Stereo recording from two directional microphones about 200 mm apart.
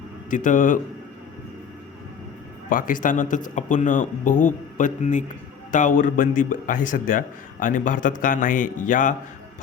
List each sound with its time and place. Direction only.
0.3 s a man's voice: 40° left (ahead or behind)
2.6 s a man's voice: 45° left (ahead or behind)